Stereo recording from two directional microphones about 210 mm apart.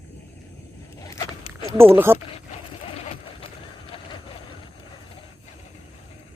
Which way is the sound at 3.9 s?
25° left (ahead or behind).